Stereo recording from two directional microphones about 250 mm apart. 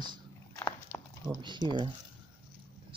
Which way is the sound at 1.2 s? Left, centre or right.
Centre.